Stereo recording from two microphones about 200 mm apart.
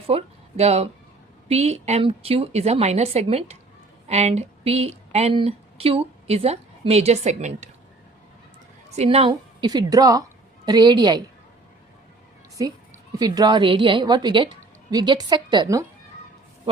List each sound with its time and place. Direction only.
0.1 s a woman's voice: 30° right (ahead or behind)
9.0 s a woman's voice: 30° right (ahead or behind)
13.1 s a woman's voice: 20° right (ahead or behind)